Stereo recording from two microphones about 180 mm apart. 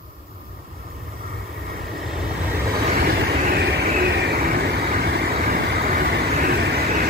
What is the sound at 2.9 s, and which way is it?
Vehicle, 55° right (ahead or behind).